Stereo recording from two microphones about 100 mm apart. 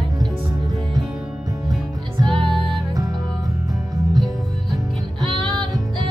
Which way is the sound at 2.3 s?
5° left (ahead or behind).